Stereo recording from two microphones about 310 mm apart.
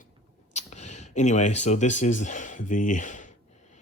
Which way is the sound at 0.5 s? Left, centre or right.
Left.